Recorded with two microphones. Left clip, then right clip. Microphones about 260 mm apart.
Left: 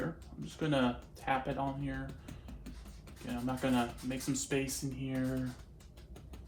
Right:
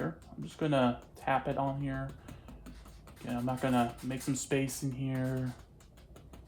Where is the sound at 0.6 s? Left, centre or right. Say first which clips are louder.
Right 3 dB; right.